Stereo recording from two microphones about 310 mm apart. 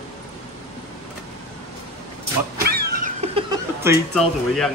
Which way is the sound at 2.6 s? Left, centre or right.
Right.